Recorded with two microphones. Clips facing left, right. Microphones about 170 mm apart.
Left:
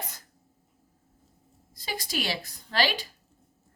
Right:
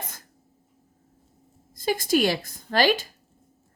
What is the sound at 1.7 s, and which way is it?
A woman's voice, 50° right (ahead or behind).